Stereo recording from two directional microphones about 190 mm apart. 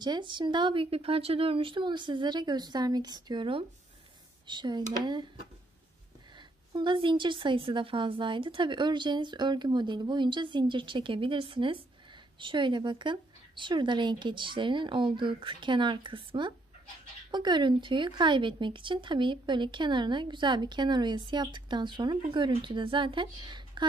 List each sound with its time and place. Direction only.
0.0 s speech: 25° right (ahead or behind)
6.7 s speech: 25° right (ahead or behind)